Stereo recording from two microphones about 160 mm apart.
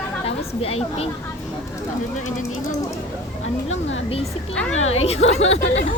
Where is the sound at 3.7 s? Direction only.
40° left (ahead or behind).